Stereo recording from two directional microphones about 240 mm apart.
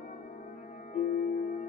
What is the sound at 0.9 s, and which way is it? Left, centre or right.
Music, left.